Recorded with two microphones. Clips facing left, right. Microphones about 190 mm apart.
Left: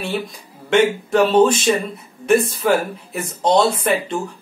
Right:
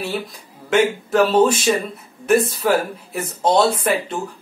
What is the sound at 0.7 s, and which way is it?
Speech, 5° right (ahead or behind).